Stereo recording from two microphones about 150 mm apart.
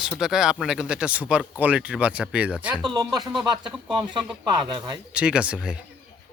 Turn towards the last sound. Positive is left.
turn(degrees=-5)  # may be behind; listen again after turning